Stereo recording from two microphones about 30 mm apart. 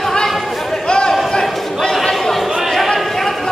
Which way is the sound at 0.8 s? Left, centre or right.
Left.